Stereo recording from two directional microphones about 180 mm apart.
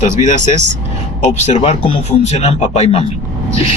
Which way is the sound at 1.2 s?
40° left (ahead or behind).